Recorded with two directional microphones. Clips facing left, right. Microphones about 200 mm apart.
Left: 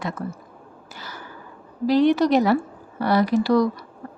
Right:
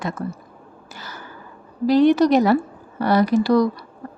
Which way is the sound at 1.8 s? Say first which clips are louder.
Right 3 dB; 45° right (ahead or behind).